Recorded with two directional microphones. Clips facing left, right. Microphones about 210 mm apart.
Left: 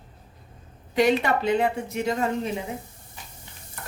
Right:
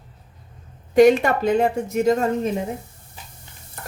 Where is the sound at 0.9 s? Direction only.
45° right (ahead or behind).